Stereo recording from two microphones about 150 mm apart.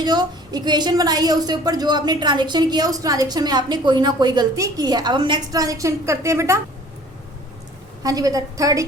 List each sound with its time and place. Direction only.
0.0 s a woman's voice: 30° right (ahead or behind)
8.0 s a woman's voice: 25° right (ahead or behind)